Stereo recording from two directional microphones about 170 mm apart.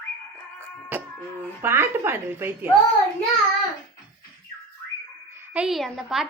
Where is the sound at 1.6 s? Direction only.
15° right (ahead or behind).